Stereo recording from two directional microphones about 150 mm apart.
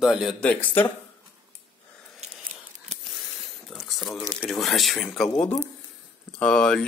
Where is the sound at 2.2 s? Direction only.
45° right (ahead or behind).